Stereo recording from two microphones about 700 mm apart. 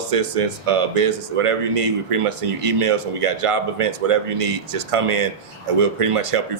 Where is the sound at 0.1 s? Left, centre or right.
Right.